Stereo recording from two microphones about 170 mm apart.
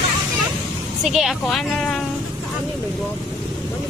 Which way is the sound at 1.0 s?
Centre (ahead or behind).